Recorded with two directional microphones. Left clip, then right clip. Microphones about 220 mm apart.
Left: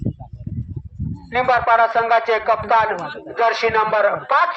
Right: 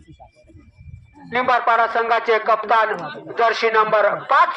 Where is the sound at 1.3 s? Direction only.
55° right (ahead or behind).